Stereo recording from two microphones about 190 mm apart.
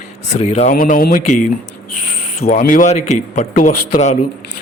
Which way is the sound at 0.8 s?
45° left (ahead or behind).